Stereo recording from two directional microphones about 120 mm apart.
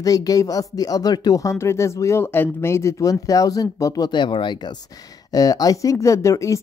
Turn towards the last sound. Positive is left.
turn(degrees=25)  # may be behind; listen again after turning